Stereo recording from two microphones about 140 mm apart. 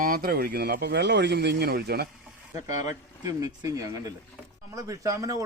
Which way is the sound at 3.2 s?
25° right (ahead or behind).